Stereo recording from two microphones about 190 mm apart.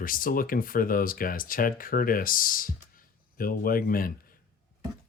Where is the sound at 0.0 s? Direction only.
45° left (ahead or behind).